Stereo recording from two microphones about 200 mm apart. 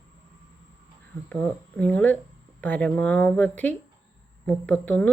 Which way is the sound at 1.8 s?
5° left (ahead or behind).